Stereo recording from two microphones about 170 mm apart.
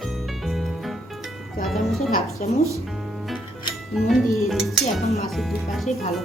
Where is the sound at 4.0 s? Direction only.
Centre (ahead or behind).